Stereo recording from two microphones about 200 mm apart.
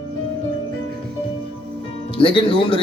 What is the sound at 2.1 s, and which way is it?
Speech, 25° left (ahead or behind).